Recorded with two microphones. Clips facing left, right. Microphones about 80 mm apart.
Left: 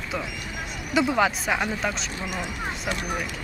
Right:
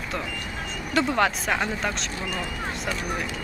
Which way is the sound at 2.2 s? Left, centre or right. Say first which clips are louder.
Even; centre.